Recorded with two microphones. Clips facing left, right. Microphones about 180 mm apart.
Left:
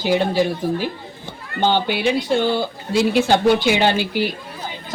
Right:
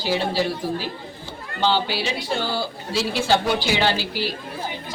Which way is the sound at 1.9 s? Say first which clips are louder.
Left 7 dB; 55° left (ahead or behind).